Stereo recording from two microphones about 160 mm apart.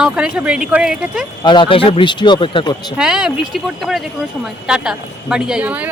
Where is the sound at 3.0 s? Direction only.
5° right (ahead or behind).